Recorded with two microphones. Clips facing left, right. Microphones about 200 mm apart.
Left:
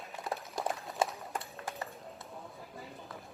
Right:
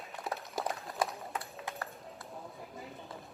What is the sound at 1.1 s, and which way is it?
Run, centre (ahead or behind).